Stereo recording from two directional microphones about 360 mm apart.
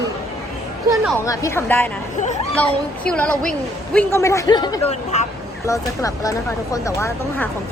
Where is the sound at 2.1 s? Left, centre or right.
Centre.